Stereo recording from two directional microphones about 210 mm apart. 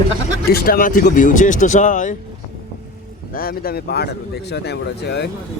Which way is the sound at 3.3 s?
45° left (ahead or behind).